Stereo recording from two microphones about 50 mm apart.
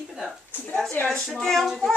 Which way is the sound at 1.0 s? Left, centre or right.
Centre.